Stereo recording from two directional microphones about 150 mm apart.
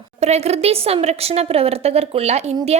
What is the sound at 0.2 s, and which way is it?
A woman's voice, 45° right (ahead or behind).